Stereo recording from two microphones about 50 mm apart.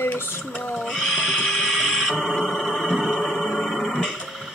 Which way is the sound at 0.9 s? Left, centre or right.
Centre.